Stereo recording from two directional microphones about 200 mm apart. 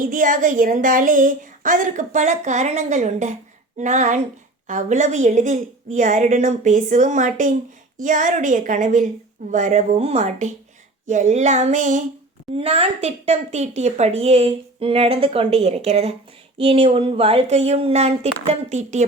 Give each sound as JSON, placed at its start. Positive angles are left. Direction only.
{"t": 0.0, "sound": "speech", "side_deg": -40}